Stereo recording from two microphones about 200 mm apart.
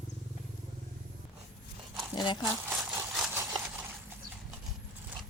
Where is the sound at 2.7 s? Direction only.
5° right (ahead or behind).